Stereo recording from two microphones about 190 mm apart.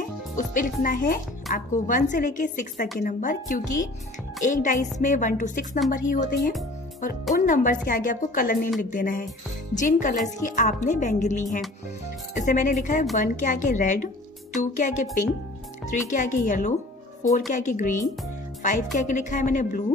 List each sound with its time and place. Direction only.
0.4 s a woman's voice: 45° left (ahead or behind)
18.9 s speech: 40° left (ahead or behind)